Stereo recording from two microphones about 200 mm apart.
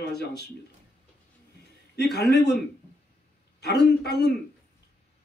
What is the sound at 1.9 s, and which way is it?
Speech, 55° left (ahead or behind).